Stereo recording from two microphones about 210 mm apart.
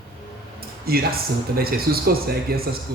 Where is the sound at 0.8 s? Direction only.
45° right (ahead or behind).